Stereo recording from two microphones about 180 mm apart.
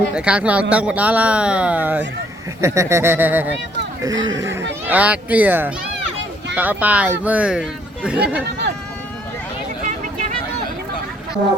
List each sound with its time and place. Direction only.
0.1 s speech: 5° right (ahead or behind)
4.0 s speech: 20° right (ahead or behind)
8.4 s speech: 70° right (ahead or behind)
9.8 s a sound: 40° right (ahead or behind)